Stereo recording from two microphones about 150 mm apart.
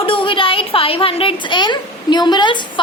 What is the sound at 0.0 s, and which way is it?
A woman's voice, 35° left (ahead or behind).